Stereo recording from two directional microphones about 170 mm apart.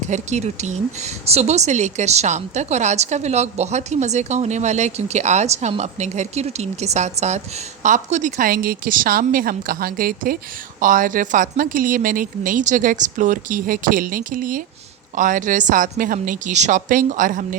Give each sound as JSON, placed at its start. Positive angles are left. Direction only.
{"t": 0.0, "sound": "speech", "side_deg": -40}